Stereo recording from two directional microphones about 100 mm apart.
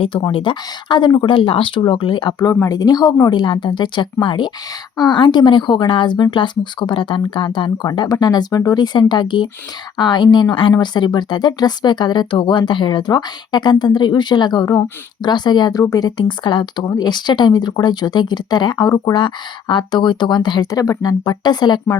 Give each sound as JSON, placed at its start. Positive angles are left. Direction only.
{"t": 0.3, "sound": "speech", "side_deg": 60}